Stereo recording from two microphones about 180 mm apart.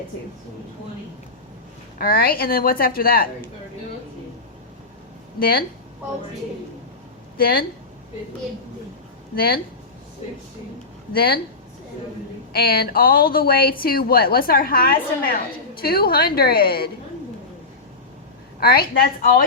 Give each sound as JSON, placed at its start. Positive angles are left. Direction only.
{"t": 2.0, "sound": "a woman's voice", "side_deg": 55}
{"t": 5.4, "sound": "a woman's voice", "side_deg": 55}
{"t": 7.3, "sound": "speech", "side_deg": 55}
{"t": 9.3, "sound": "a woman's voice", "side_deg": 55}
{"t": 11.1, "sound": "a woman's voice", "side_deg": 55}
{"t": 12.5, "sound": "a woman's voice", "side_deg": 60}
{"t": 18.6, "sound": "a woman's voice", "side_deg": 60}